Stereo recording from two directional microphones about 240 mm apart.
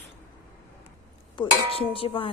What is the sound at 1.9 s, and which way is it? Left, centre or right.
Music, left.